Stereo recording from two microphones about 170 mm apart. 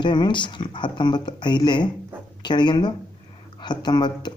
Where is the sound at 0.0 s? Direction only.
25° left (ahead or behind).